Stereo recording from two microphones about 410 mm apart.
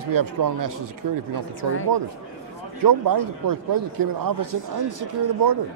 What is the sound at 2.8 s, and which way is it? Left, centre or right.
A man's voice, right.